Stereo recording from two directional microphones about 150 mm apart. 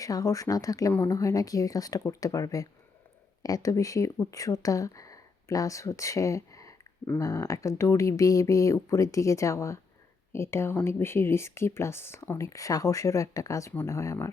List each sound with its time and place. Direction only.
0.0 s speech: 25° left (ahead or behind)